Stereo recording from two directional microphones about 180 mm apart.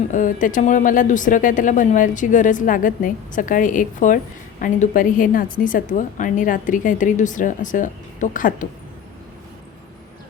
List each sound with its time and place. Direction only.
0.1 s speech: 45° left (ahead or behind)